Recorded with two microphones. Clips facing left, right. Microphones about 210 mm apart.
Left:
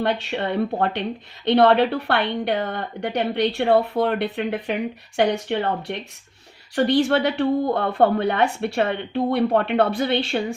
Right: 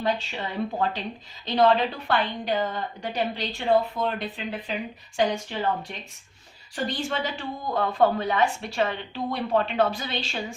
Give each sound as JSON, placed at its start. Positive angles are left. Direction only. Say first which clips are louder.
{"t": 0.0, "sound": "a woman's voice", "louder": "left 5 dB", "side_deg": 65}